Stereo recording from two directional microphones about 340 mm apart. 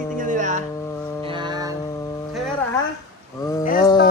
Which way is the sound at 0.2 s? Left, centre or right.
Right.